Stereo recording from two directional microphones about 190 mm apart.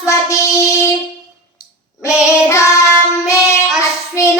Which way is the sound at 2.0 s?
5° right (ahead or behind).